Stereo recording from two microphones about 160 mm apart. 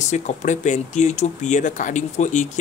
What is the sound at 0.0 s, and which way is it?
Speech, 50° left (ahead or behind).